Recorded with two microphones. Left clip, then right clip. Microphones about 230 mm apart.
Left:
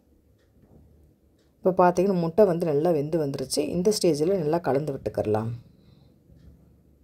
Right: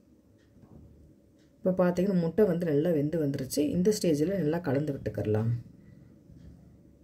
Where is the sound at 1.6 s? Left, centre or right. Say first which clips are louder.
Left 7 dB; left.